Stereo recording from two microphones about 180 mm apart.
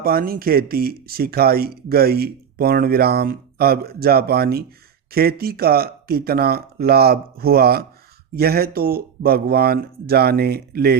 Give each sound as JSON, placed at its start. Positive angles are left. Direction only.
{"t": 0.0, "sound": "speech", "side_deg": -55}